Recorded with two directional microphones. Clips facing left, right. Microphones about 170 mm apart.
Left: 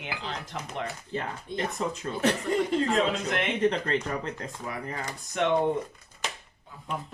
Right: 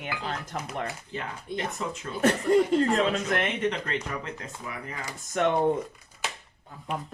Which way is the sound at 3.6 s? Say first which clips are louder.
Left 3 dB; 35° left (ahead or behind).